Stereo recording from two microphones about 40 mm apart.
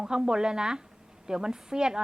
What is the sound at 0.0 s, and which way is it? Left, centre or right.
Speech, centre.